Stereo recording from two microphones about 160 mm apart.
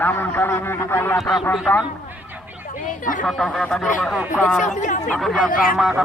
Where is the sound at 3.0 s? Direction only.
55° left (ahead or behind).